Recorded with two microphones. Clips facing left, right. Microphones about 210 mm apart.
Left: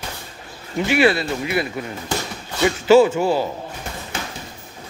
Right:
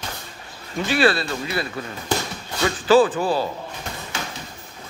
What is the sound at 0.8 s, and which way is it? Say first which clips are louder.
Speech: left 2 dB; 20° left (ahead or behind).